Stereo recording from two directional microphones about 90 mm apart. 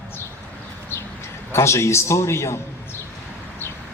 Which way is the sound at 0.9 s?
25° left (ahead or behind).